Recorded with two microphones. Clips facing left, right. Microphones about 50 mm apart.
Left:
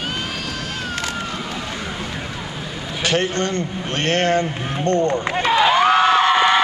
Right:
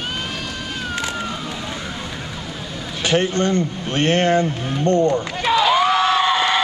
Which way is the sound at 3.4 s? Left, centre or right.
Right.